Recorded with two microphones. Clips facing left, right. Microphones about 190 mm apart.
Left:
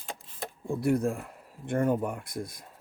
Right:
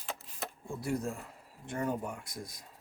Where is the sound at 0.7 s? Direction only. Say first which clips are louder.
Left 9 dB; 60° left (ahead or behind).